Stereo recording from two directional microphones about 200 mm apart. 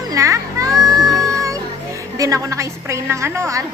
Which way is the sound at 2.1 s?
15° right (ahead or behind).